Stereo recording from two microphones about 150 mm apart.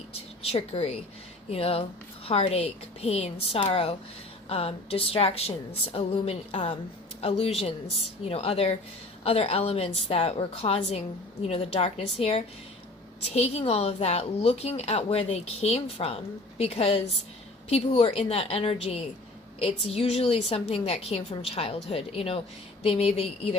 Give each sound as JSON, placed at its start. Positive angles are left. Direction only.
{"t": 0.1, "sound": "a woman's voice", "side_deg": 40}